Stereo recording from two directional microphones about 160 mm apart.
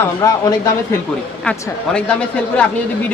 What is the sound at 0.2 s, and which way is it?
Speech, 20° left (ahead or behind).